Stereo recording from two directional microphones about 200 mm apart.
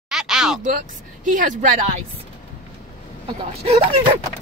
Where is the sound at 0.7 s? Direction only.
40° right (ahead or behind).